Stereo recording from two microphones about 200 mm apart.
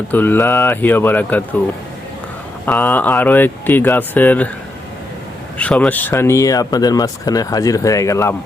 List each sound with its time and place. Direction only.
0.1 s speech: 10° left (ahead or behind)
2.6 s speech: 10° left (ahead or behind)
5.5 s speech: 5° left (ahead or behind)